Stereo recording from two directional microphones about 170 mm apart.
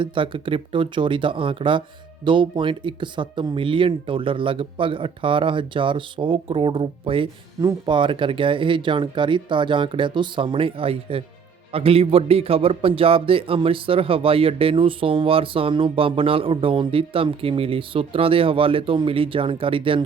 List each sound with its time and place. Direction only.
0.0 s a man's voice: 30° right (ahead or behind)